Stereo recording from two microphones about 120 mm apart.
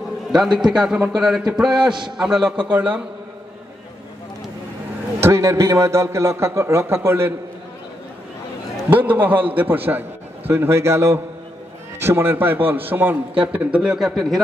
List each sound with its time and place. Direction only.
0.3 s a man's voice: 5° right (ahead or behind)
5.2 s a man's voice: 25° right (ahead or behind)
8.9 s a man's voice: 15° right (ahead or behind)